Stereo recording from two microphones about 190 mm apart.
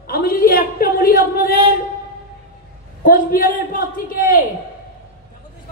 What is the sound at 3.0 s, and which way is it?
A man's voice, 50° left (ahead or behind).